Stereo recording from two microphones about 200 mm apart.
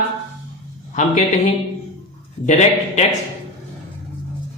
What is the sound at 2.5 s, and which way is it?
Speech, 35° left (ahead or behind).